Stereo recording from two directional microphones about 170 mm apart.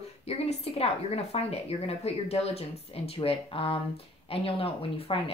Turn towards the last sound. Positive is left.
turn(degrees=35)  # may be behind; listen again after turning